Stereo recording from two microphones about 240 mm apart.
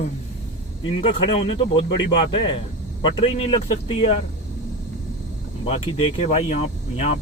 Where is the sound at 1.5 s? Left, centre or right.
Left.